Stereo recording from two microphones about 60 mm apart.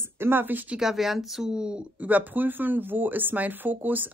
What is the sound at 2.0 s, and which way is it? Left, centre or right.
Speech, right.